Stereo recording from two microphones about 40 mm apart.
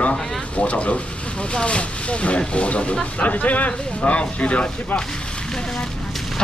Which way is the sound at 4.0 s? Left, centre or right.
Left.